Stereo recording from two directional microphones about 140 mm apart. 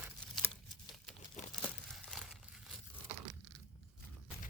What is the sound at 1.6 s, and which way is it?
Crumpling, centre (ahead or behind).